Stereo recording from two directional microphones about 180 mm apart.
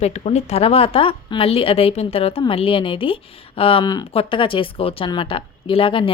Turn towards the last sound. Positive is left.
turn(degrees=30)  # may be behind; listen again after turning